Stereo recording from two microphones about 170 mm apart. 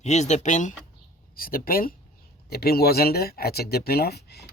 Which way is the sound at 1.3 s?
60° left (ahead or behind).